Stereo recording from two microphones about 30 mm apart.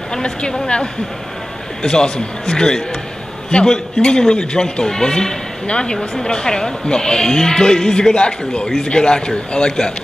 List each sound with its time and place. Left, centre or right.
0.1 s speech: left
1.8 s speech: left
5.7 s speech: left